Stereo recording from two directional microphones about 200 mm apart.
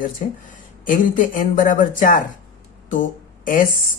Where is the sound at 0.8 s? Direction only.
40° left (ahead or behind).